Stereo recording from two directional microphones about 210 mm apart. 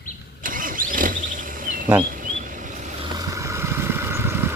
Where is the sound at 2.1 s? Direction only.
40° right (ahead or behind).